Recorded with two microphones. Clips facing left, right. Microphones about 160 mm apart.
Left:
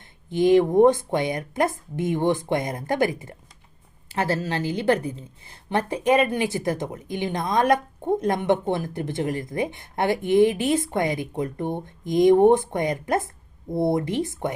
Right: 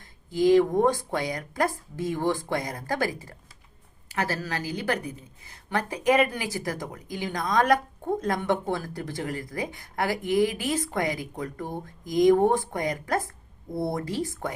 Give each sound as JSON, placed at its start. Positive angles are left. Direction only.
{"t": 0.0, "sound": "a woman's voice", "side_deg": 25}